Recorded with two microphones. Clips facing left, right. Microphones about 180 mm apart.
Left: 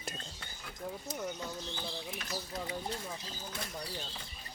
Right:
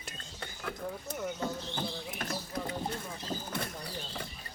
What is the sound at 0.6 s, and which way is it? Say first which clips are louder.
Speech: right 4 dB; 60° right (ahead or behind).